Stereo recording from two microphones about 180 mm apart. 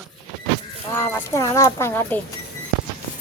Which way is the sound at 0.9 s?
10° left (ahead or behind).